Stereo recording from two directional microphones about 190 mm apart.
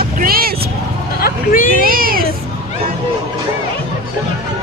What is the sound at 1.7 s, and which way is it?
Speech, 50° right (ahead or behind).